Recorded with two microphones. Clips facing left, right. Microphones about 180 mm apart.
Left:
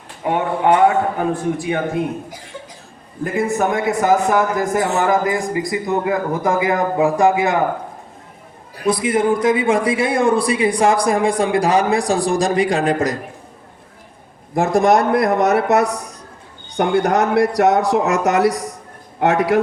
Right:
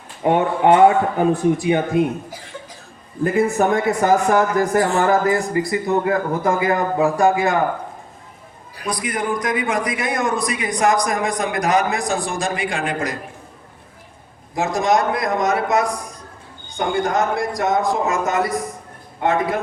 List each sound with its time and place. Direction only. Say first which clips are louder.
0.3 s a man's voice: right 2 dB; 25° right (ahead or behind)
3.2 s a man's voice: right 2 dB; centre (ahead or behind); by 7.6 s 20° left (ahead or behind)
8.9 s a man's voice: left 7 dB; 25° left (ahead or behind); by 13.1 s 40° left (ahead or behind)
14.5 s a man's voice: left 4 dB; 55° left (ahead or behind); by 19.5 s 80° left